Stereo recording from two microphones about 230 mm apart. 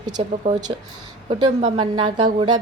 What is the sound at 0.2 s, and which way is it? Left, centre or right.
A woman's voice, right.